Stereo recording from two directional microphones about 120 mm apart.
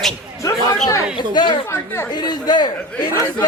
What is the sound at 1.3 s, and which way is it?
Speech, 40° left (ahead or behind).